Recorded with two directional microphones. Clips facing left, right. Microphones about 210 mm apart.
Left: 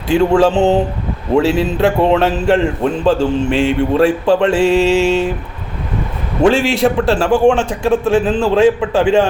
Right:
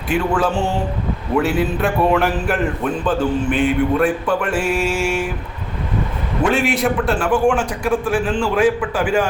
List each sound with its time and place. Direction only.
0.1 s a man's voice: 25° left (ahead or behind)
6.5 s a man's voice: 25° left (ahead or behind)